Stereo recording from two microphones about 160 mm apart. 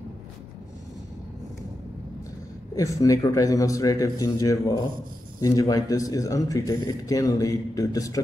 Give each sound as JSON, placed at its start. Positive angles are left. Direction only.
{"t": 2.7, "sound": "speech", "side_deg": 20}